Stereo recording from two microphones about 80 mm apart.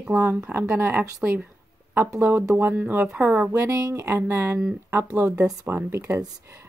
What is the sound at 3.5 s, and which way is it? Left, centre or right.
A woman's voice, right.